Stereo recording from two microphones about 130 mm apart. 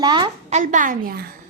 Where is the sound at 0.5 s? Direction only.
75° right (ahead or behind).